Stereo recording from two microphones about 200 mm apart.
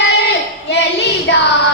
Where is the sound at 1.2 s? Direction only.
60° left (ahead or behind).